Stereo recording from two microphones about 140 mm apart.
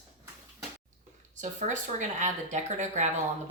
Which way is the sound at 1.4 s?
60° right (ahead or behind).